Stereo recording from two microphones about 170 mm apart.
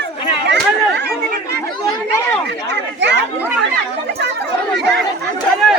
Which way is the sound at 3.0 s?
90° right.